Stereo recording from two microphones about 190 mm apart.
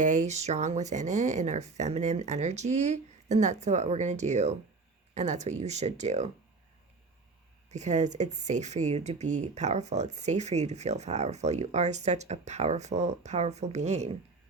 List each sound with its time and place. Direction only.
0.0 s speech: 40° right (ahead or behind)
7.7 s speech: 35° right (ahead or behind)